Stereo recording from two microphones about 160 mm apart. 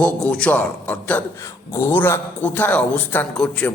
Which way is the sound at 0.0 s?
10° left (ahead or behind).